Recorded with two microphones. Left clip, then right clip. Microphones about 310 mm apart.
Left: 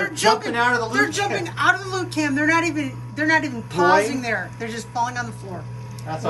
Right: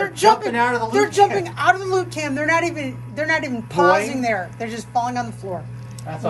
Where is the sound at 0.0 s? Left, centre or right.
Centre.